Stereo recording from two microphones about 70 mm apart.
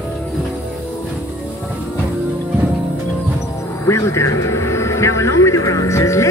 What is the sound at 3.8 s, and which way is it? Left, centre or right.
Vehicle, left.